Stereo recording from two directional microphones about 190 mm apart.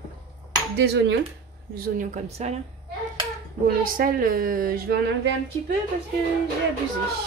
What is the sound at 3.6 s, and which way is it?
Speech, 45° right (ahead or behind).